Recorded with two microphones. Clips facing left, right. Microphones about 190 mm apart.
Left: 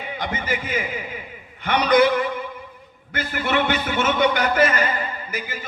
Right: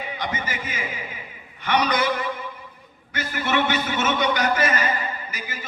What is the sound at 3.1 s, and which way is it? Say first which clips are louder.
A man's voice: left 1 dB; 55° left (ahead or behind).